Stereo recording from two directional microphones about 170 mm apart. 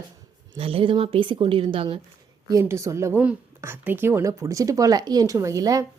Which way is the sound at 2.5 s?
20° right (ahead or behind).